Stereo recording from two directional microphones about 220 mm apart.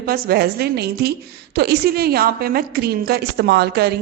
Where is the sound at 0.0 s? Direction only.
45° right (ahead or behind).